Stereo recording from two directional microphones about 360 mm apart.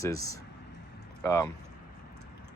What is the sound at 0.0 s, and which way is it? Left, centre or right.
Speech, centre.